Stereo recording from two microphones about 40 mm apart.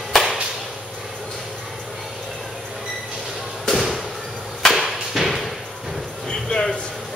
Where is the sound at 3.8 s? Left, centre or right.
Centre.